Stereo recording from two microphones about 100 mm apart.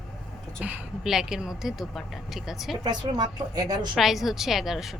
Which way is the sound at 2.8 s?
45° right (ahead or behind).